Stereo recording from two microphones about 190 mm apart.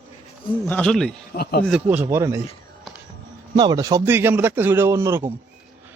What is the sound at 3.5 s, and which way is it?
A man's voice, 20° right (ahead or behind).